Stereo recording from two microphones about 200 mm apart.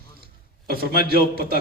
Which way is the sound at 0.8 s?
50° right (ahead or behind).